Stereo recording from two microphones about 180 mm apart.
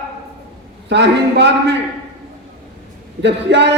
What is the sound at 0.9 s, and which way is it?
Speech, 70° right (ahead or behind).